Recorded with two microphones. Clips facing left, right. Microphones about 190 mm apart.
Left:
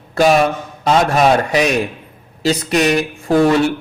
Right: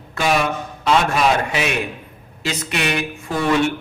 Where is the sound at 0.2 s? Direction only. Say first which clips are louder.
Left 7 dB; 40° left (ahead or behind).